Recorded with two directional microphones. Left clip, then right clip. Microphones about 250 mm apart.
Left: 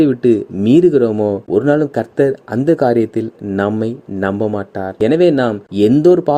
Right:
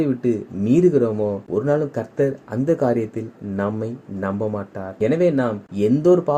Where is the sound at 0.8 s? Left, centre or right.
Left.